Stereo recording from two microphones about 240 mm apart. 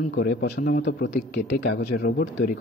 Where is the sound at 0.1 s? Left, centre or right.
Left.